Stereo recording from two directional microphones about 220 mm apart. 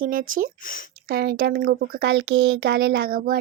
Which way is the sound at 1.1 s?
45° right (ahead or behind).